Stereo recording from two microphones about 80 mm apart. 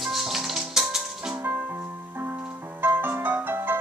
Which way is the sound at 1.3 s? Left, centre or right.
Right.